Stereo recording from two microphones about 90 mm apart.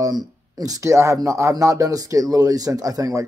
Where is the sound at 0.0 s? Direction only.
45° right (ahead or behind).